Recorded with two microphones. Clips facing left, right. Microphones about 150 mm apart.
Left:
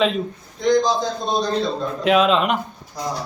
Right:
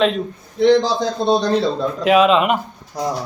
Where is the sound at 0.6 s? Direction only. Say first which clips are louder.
Right 4 dB; 70° right (ahead or behind).